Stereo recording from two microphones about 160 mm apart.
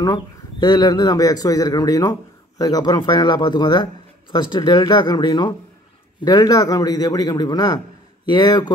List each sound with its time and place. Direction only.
0.0 s a man's voice: 25° left (ahead or behind)